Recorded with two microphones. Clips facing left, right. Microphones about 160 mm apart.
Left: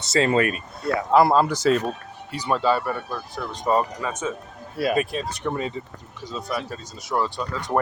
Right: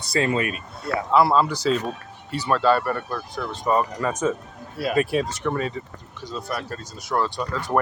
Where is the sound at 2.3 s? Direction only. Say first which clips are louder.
Right 2 dB; 15° left (ahead or behind).